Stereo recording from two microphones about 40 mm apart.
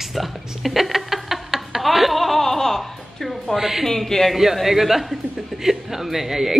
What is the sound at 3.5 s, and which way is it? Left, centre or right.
Speech, centre.